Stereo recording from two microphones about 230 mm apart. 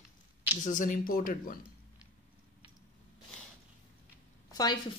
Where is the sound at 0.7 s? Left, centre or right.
Left.